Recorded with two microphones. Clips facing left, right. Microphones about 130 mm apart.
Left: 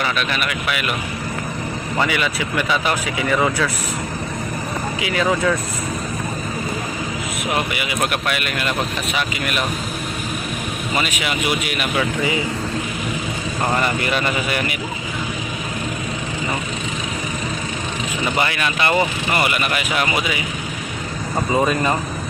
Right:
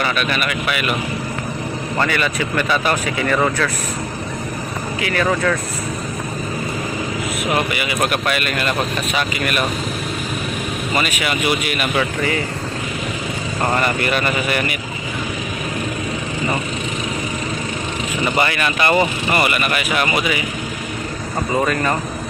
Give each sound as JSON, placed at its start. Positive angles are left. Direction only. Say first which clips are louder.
{"t": 0.0, "sound": "speech", "louder": "right 2 dB", "side_deg": 0}
{"t": 2.0, "sound": "speech", "louder": "right 1 dB", "side_deg": 10}
{"t": 4.9, "sound": "speech", "louder": "right 1 dB", "side_deg": 15}
{"t": 7.5, "sound": "speech", "louder": "right 2 dB", "side_deg": 5}
{"t": 10.9, "sound": "speech", "louder": "right 2 dB", "side_deg": 5}
{"t": 13.7, "sound": "speech", "louder": "right 2 dB", "side_deg": 5}
{"t": 18.3, "sound": "speech", "louder": "right 2 dB", "side_deg": 5}
{"t": 21.5, "sound": "speech", "louder": "even", "side_deg": 15}